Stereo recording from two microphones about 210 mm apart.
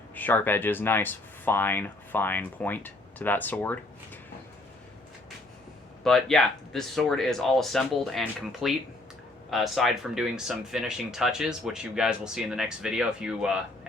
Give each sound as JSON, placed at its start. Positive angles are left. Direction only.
{"t": 0.1, "sound": "speech", "side_deg": 10}
{"t": 6.0, "sound": "speech", "side_deg": 0}